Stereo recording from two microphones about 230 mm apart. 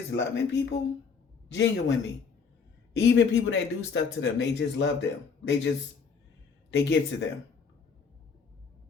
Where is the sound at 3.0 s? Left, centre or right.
Left.